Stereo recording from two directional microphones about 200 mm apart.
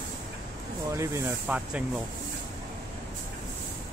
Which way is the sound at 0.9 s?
15° right (ahead or behind).